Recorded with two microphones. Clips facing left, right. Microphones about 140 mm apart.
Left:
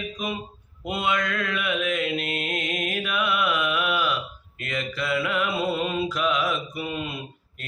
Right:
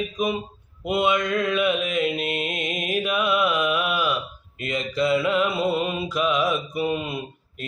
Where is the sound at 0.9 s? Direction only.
20° right (ahead or behind).